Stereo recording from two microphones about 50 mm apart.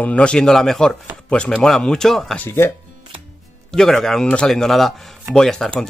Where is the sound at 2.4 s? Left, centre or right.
Left.